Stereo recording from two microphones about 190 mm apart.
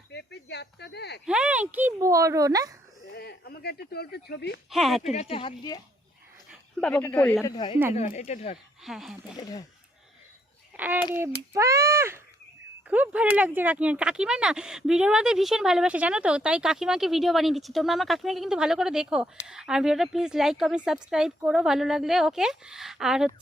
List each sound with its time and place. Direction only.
0.1 s speech: 65° left (ahead or behind)
1.2 s speech: 5° right (ahead or behind)
3.1 s speech: 55° left (ahead or behind)
4.7 s speech: centre (ahead or behind)
5.1 s speech: 30° left (ahead or behind)
6.5 s a woman's voice: 5° left (ahead or behind)
7.4 s speech: 25° left (ahead or behind)
7.9 s speech: 35° left (ahead or behind)
8.8 s speech: centre (ahead or behind)
9.4 s speech: 20° left (ahead or behind)
10.8 s a child's voice: 10° right (ahead or behind)